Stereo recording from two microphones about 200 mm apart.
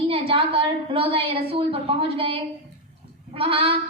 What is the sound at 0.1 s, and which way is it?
A woman's voice, 25° right (ahead or behind).